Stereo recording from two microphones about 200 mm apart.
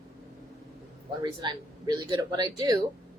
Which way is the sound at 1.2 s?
20° right (ahead or behind).